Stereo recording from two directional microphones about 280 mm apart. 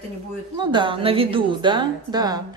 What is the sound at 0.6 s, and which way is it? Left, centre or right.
A woman's voice, centre.